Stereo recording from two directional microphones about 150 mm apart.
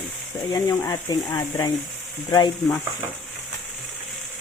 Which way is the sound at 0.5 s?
20° left (ahead or behind).